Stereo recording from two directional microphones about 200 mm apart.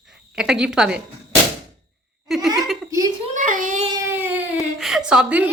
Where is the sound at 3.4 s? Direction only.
40° right (ahead or behind).